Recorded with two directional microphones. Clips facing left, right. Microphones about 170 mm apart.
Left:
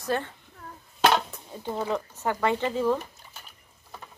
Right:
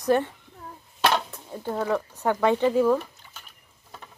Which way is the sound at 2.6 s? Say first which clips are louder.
Right 5 dB; 10° right (ahead or behind).